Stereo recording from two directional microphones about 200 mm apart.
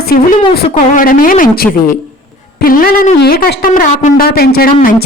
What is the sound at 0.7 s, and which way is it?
A woman's voice, 40° left (ahead or behind).